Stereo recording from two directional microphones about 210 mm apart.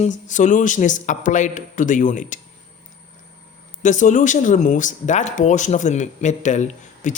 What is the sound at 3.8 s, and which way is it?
Speech, 35° left (ahead or behind).